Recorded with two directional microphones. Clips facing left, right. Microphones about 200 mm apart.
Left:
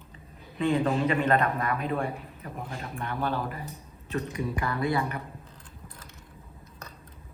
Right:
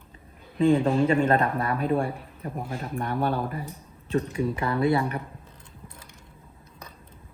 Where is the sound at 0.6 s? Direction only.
30° right (ahead or behind).